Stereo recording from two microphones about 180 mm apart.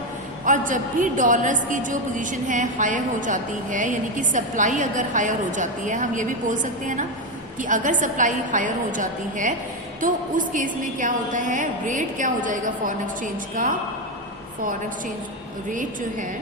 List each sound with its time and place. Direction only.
0.4 s a woman's voice: 45° right (ahead or behind)